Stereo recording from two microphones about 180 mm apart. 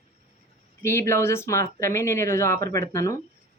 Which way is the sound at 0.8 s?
15° left (ahead or behind).